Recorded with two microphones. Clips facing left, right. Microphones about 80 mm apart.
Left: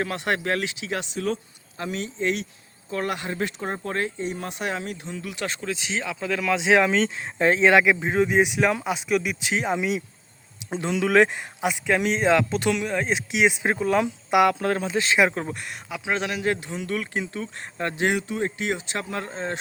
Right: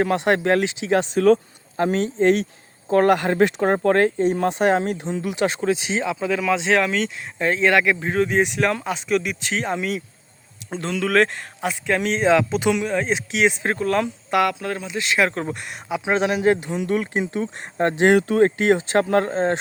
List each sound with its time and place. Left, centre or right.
0.0 s speech: right
0.9 s speech: right
3.2 s speech: right
4.9 s speech: right; by 6.7 s centre
6.7 s speech: left
14.6 s speech: left
15.2 s speech: centre
15.4 s speech: centre
16.0 s speech: right
18.2 s speech: right
18.5 s speech: right